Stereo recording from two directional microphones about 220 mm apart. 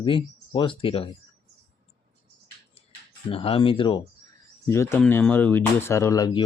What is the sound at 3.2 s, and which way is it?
Speech, 25° left (ahead or behind).